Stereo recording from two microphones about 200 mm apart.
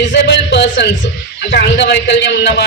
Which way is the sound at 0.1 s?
60° left (ahead or behind).